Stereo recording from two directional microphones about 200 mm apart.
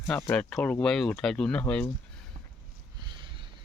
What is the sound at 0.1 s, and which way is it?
Speech, 5° left (ahead or behind).